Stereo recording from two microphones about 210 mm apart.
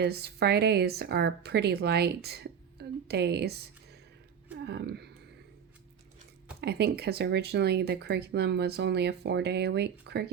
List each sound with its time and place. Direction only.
0.0 s speech: 50° right (ahead or behind)
6.6 s speech: 50° right (ahead or behind)